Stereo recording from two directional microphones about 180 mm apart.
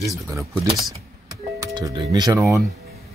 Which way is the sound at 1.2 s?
20° right (ahead or behind).